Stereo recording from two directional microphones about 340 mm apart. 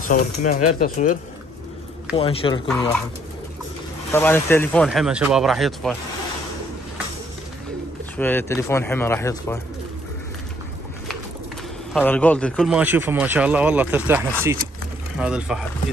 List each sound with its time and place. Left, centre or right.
0.1 s speech: left
2.1 s speech: centre
4.1 s speech: centre
8.2 s speech: centre
11.9 s speech: centre